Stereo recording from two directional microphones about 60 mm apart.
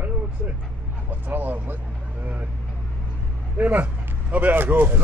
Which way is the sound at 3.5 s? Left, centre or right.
Right.